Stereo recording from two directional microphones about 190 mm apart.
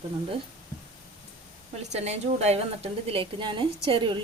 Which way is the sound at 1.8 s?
35° right (ahead or behind).